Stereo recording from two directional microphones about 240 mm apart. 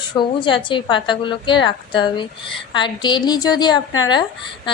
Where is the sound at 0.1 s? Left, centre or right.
Centre.